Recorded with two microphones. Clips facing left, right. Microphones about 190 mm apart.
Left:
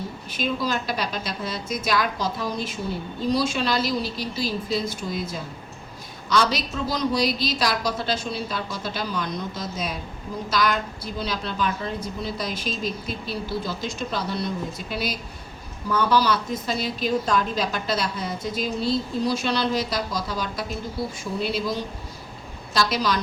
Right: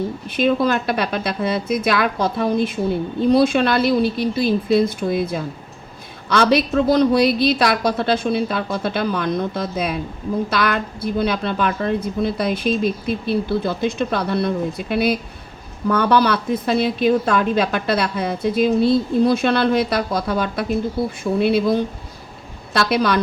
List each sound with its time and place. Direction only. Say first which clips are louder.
0.3 s a woman's voice: right 9 dB; 60° right (ahead or behind)